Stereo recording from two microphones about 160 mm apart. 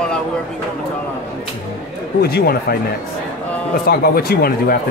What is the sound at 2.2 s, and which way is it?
Speech, 75° left (ahead or behind).